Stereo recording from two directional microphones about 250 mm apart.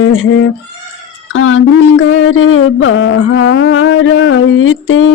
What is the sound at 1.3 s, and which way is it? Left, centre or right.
Mantra, left.